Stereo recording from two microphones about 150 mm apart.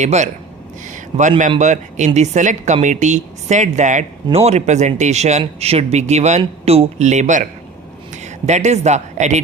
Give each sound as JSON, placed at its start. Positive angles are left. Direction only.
{"t": 0.0, "sound": "speech", "side_deg": -50}
{"t": 0.9, "sound": "a sound", "side_deg": -55}
{"t": 1.4, "sound": "speech", "side_deg": -55}